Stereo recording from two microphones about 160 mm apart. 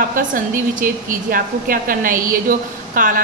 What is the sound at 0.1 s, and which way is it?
A woman's voice, 60° right (ahead or behind).